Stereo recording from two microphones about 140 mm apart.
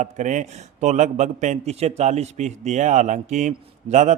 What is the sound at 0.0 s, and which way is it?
A man's voice, 60° right (ahead or behind).